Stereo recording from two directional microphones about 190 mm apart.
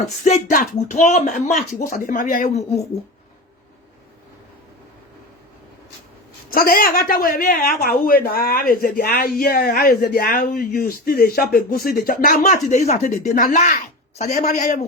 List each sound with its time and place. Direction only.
0.3 s speech: 40° left (ahead or behind)
6.5 s speech: 50° left (ahead or behind)